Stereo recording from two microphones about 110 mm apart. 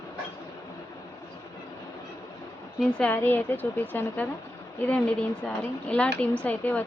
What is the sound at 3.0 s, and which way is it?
Speech, 15° left (ahead or behind).